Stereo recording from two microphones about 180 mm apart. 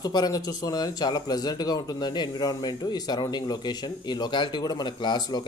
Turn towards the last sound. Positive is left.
turn(degrees=25)  # may be behind; listen again after turning